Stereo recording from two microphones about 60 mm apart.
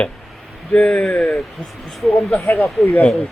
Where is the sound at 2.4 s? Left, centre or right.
Left.